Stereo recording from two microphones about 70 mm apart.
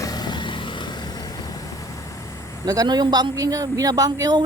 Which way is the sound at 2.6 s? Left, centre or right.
Right.